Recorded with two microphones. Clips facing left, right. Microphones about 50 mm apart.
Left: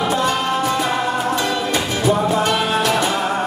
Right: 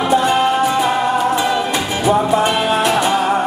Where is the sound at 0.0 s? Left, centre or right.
Centre.